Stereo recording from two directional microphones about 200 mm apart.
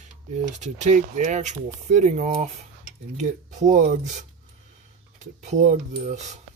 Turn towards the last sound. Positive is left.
turn(degrees=-35)  # may be behind; listen again after turning